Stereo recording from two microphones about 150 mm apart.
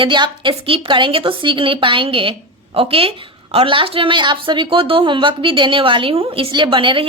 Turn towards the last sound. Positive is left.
turn(degrees=-35)  # may be behind; listen again after turning